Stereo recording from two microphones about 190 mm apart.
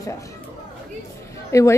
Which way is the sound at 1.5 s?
15° left (ahead or behind).